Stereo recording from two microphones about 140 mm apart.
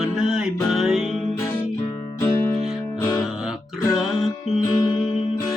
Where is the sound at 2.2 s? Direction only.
15° left (ahead or behind).